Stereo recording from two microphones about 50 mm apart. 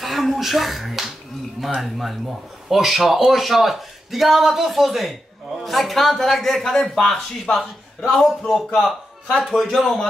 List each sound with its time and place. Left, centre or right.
0.0 s speech: centre
7.5 s a man's voice: left
8.1 s speech: centre
9.4 s speech: centre